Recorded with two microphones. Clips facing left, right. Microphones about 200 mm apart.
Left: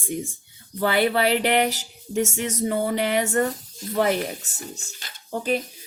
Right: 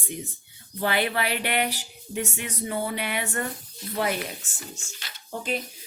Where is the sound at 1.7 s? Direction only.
45° left (ahead or behind).